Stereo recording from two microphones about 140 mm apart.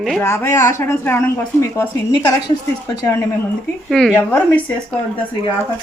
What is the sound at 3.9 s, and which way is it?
Speech, 5° left (ahead or behind).